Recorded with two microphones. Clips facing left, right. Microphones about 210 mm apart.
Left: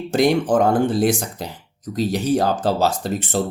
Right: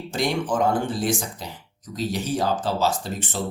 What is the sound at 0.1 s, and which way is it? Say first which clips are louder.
Speech: left 8 dB; 65° left (ahead or behind).